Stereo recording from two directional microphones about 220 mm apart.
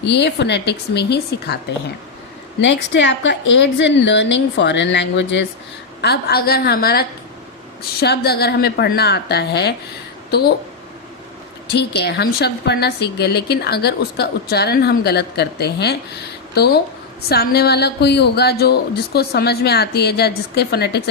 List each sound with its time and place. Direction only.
0.0 s a woman's voice: 50° left (ahead or behind)
2.6 s a woman's voice: 55° left (ahead or behind)
11.7 s a woman's voice: 50° left (ahead or behind)